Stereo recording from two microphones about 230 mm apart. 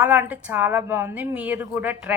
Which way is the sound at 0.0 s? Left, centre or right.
Centre.